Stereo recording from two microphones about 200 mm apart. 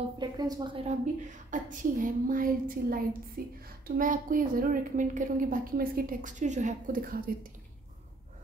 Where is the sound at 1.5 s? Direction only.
40° right (ahead or behind).